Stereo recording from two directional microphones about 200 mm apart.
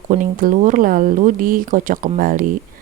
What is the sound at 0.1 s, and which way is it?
Speech, 40° right (ahead or behind).